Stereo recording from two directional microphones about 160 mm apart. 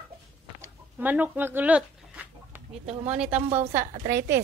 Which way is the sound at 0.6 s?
10° right (ahead or behind).